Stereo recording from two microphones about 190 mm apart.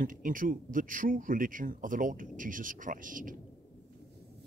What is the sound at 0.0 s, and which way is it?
Speech, 45° right (ahead or behind).